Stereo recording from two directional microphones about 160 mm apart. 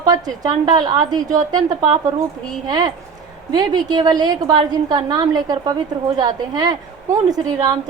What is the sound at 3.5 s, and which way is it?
A woman's voice, 25° right (ahead or behind).